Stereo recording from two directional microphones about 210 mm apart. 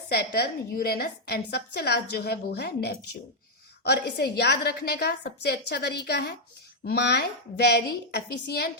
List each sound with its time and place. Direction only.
0.1 s a woman's voice: 50° left (ahead or behind)